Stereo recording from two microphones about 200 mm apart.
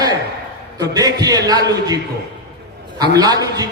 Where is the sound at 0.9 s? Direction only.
20° right (ahead or behind).